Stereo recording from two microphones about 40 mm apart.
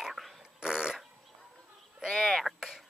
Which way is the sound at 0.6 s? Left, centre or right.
Centre.